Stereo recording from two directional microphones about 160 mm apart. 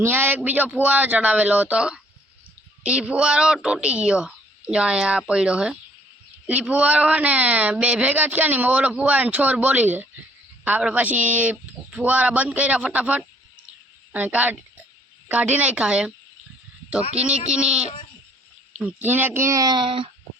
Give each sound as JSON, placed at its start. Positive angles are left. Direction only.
{"t": 0.0, "sound": "speech", "side_deg": -15}
{"t": 17.2, "sound": "speech", "side_deg": -5}